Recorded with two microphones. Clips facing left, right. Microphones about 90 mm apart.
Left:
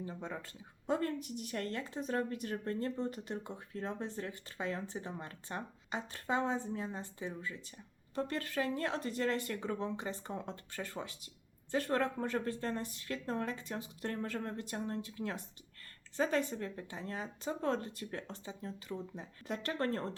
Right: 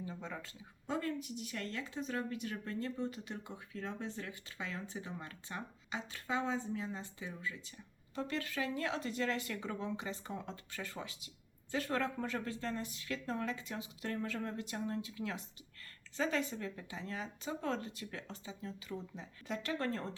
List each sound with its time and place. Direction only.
0.9 s a woman's voice: 45° left (ahead or behind)
18.9 s speech: 15° left (ahead or behind)
19.5 s a woman's voice: 45° left (ahead or behind)